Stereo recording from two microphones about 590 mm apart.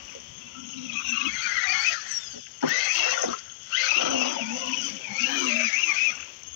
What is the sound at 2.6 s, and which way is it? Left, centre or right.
Horse, right.